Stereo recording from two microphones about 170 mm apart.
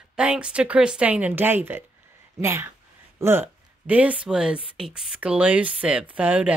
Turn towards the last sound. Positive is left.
turn(degrees=-10)  # may be behind; listen again after turning